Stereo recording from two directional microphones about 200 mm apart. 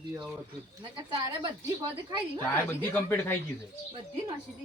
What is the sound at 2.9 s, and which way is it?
Speech, 10° left (ahead or behind).